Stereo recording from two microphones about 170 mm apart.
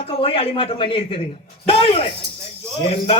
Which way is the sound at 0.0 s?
35° left (ahead or behind).